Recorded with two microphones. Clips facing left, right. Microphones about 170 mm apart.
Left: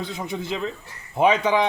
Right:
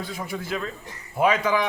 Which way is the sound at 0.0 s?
20° left (ahead or behind).